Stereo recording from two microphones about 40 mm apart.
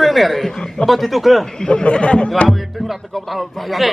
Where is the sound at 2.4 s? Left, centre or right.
Centre.